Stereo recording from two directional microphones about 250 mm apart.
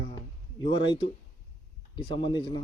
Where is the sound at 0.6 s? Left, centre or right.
Centre.